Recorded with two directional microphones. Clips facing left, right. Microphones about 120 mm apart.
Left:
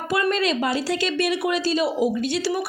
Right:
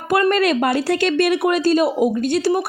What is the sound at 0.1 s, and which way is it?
A woman's voice, 55° right (ahead or behind).